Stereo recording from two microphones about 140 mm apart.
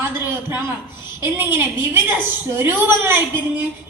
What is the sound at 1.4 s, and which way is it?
Speech, 15° right (ahead or behind).